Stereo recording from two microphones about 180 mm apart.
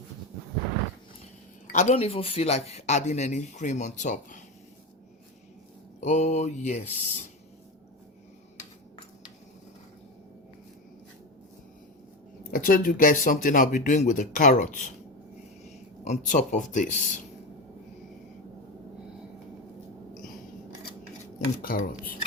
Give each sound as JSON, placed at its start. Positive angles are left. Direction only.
{"t": 1.6, "sound": "speech", "side_deg": 40}
{"t": 6.0, "sound": "speech", "side_deg": 40}
{"t": 12.4, "sound": "speech", "side_deg": 55}
{"t": 21.6, "sound": "speech", "side_deg": 55}